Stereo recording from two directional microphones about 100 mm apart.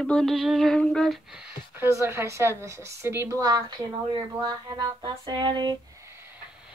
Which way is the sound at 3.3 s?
40° right (ahead or behind).